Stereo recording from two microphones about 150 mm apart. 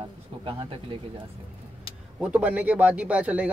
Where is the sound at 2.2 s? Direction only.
10° right (ahead or behind).